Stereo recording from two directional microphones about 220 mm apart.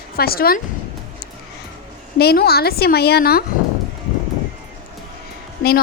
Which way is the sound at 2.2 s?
45° left (ahead or behind).